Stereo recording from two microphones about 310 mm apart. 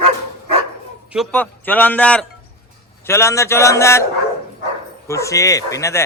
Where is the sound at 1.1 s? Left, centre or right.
Centre.